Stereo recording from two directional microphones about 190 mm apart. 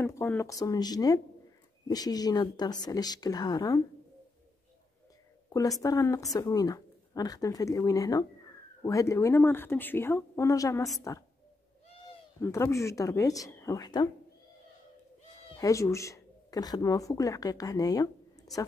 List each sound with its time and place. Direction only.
0.0 s speech: 15° left (ahead or behind)
5.5 s speech: 20° left (ahead or behind)
12.4 s speech: 15° left (ahead or behind)
15.5 s speech: 15° left (ahead or behind)